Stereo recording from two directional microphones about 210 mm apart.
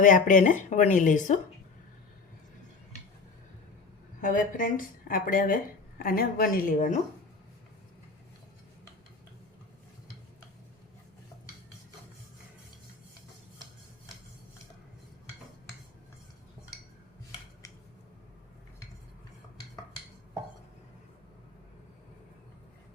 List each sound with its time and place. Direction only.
0.0 s a woman's voice: 40° left (ahead or behind)
4.2 s a woman's voice: 40° left (ahead or behind)